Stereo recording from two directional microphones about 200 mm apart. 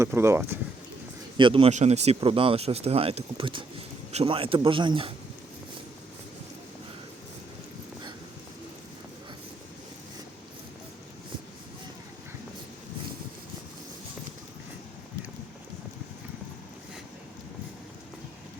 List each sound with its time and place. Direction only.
0.0 s speech: 15° right (ahead or behind)
1.4 s speech: 25° right (ahead or behind)